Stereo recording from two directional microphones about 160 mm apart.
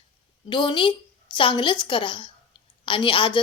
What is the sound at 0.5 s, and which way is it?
A woman's voice, 30° left (ahead or behind).